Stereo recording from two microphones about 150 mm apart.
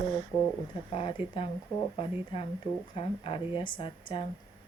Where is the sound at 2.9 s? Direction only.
35° left (ahead or behind).